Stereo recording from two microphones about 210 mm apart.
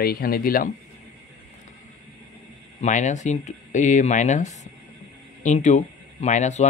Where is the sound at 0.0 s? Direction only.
45° left (ahead or behind).